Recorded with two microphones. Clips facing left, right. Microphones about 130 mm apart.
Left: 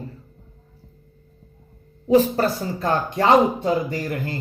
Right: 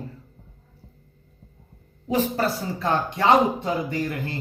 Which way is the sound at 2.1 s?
40° left (ahead or behind).